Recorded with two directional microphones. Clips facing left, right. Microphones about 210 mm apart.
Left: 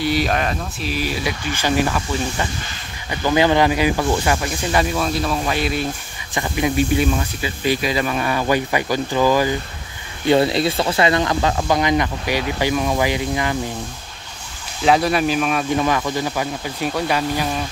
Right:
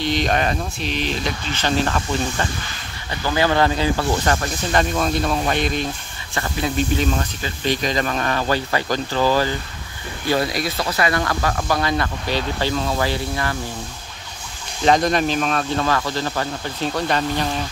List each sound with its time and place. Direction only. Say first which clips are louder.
0.0 s speech: left 1 dB; 10° left (ahead or behind)
3.1 s speech: left 4 dB; 15° left (ahead or behind)
10.2 s speech: left 5 dB; 25° left (ahead or behind)
14.9 s speech: left 1 dB; 5° left (ahead or behind)